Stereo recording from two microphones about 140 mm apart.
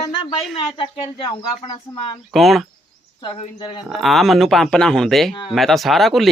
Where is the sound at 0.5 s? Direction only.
40° left (ahead or behind).